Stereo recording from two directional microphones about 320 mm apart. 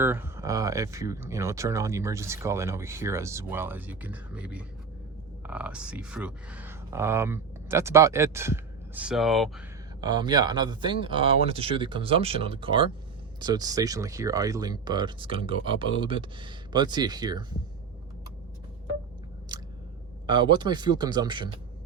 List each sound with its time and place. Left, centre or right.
0.0 s speech: centre
10.0 s speech: centre
19.5 s chewing: centre
20.2 s speech: centre